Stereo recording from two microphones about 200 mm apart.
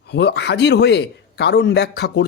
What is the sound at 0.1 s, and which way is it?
Speech, 55° left (ahead or behind).